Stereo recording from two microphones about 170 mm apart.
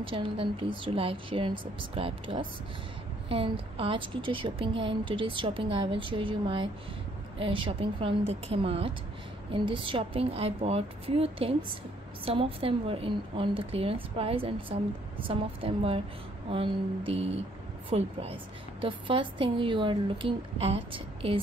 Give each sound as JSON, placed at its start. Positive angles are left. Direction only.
{"t": 0.0, "sound": "speech", "side_deg": -30}